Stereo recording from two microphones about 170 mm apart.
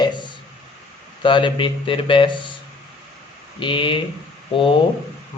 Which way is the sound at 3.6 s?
30° left (ahead or behind).